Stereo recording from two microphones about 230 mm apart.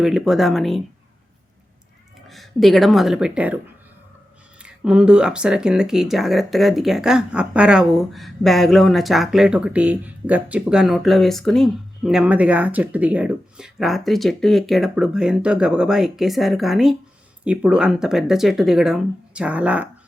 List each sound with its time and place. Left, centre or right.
0.0 s speech: centre
2.2 s speech: centre
4.6 s speech: centre